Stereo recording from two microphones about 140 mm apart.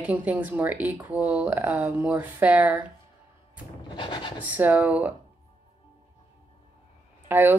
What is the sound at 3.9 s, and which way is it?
Rub, 35° left (ahead or behind).